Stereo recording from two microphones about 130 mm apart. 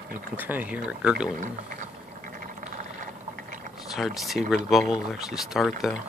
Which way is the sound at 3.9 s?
Centre (ahead or behind).